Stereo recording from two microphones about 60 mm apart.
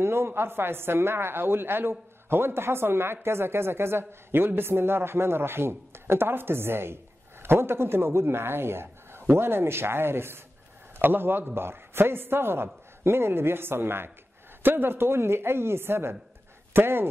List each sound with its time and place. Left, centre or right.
0.0 s speech: right